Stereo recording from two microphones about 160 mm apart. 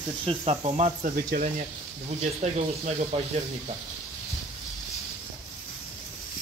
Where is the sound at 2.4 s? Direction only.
40° right (ahead or behind).